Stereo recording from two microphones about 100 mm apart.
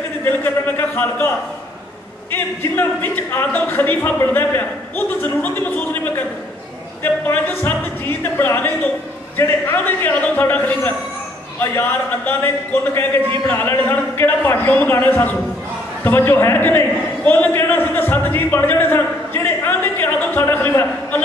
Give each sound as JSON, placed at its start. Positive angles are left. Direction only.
{"t": 0.2, "sound": "a man's voice", "side_deg": 20}
{"t": 2.3, "sound": "a man's voice", "side_deg": 20}
{"t": 13.5, "sound": "a man's voice", "side_deg": 20}